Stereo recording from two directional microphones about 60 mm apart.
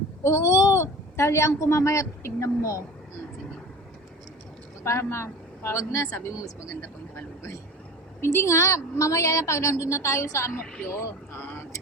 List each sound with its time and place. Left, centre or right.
0.2 s a woman's voice: left
4.8 s a woman's voice: left
6.3 s speech: left
8.2 s a woman's voice: left
11.3 s a sound: left